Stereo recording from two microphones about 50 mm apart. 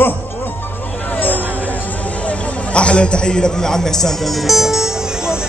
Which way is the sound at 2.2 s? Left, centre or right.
Left.